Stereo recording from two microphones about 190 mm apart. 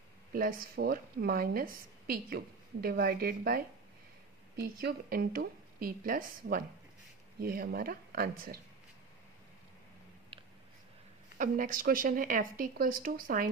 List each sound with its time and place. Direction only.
0.3 s a woman's voice: 50° right (ahead or behind)
10.3 s a sound: 25° right (ahead or behind)
11.3 s a woman's voice: 45° right (ahead or behind)